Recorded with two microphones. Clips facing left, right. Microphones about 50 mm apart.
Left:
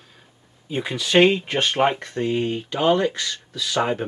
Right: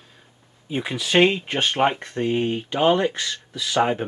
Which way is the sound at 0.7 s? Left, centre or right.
Centre.